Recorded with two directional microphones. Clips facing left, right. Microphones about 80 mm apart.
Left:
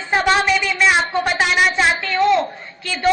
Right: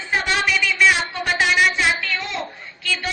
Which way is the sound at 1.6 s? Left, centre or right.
Left.